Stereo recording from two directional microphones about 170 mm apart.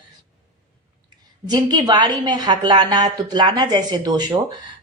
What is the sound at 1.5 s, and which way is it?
A woman's voice, 25° right (ahead or behind).